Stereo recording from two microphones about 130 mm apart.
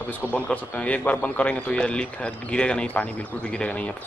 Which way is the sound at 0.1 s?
10° left (ahead or behind).